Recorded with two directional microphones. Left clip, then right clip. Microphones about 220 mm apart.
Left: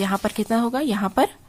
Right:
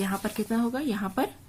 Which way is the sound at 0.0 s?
45° left (ahead or behind).